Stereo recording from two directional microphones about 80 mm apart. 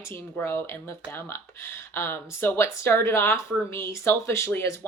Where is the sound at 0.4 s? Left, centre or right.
Left.